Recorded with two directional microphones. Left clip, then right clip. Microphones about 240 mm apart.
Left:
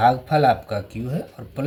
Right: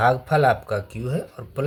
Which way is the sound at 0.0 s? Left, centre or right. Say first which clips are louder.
Left 1 dB; right.